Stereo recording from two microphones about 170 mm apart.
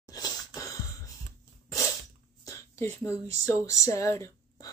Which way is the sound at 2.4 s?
20° left (ahead or behind).